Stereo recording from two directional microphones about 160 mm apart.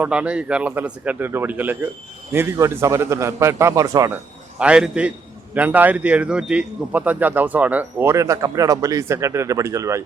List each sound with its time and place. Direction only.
0.0 s speech: 5° right (ahead or behind)
4.5 s speech: 5° right (ahead or behind)